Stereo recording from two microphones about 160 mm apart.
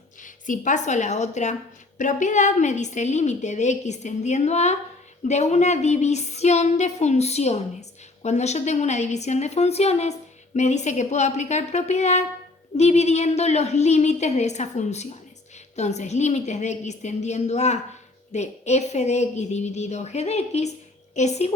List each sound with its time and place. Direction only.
0.2 s a woman's voice: 55° left (ahead or behind)